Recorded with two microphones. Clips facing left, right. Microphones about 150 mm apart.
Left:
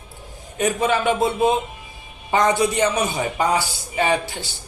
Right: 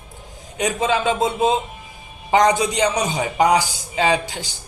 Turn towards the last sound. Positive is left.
turn(degrees=-15)  # may be behind; listen again after turning